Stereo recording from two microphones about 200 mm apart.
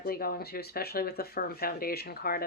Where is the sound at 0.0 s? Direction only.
50° left (ahead or behind).